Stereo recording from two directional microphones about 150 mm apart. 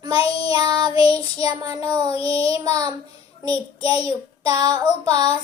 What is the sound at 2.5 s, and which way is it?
Child singing, 25° right (ahead or behind).